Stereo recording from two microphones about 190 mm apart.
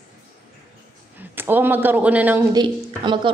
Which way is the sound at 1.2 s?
10° right (ahead or behind).